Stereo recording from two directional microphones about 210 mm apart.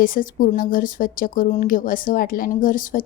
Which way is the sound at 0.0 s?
40° left (ahead or behind).